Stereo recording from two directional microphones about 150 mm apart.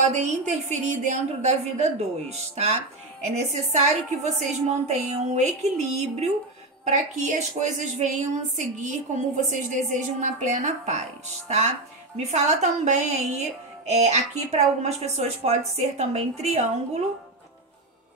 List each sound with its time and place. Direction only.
0.0 s a woman's voice: 50° right (ahead or behind)